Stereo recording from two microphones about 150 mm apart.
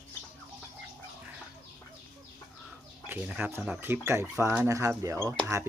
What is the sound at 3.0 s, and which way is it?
Speech, 10° right (ahead or behind).